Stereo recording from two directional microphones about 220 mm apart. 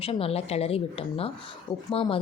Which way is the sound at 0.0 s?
25° left (ahead or behind).